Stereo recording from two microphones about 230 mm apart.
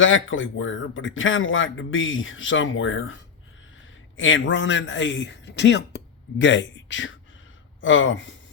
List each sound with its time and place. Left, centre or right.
0.0 s speech: left
4.2 s speech: left